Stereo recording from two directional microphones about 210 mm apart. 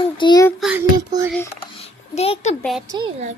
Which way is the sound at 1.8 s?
30° left (ahead or behind).